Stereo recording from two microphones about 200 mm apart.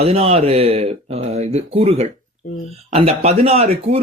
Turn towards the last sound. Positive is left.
turn(degrees=-30)  # may be behind; listen again after turning